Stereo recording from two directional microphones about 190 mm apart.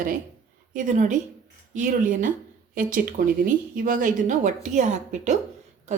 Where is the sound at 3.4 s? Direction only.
45° right (ahead or behind).